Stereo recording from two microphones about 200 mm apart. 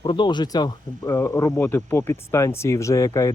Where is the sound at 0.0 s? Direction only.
25° left (ahead or behind).